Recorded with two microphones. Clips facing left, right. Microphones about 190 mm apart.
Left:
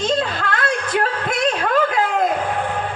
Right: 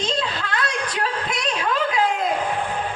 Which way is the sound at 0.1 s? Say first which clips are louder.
Left 5 dB; 55° left (ahead or behind).